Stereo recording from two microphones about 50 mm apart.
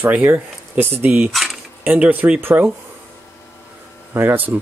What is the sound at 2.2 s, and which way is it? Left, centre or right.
Speech, right.